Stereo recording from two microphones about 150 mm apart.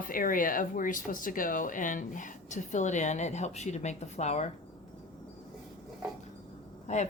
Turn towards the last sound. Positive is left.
turn(degrees=50)  # may be behind; listen again after turning